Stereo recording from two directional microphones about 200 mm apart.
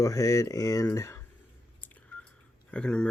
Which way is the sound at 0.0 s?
15° left (ahead or behind).